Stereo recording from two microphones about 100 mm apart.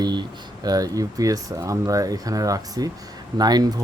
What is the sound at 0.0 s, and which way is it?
Speech, 45° right (ahead or behind).